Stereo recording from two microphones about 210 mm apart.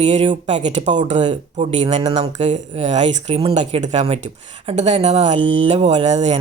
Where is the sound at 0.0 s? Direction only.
30° right (ahead or behind).